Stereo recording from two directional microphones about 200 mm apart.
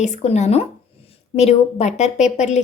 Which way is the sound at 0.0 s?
35° left (ahead or behind).